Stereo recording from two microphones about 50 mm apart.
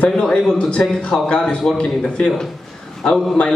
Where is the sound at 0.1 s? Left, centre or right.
Centre.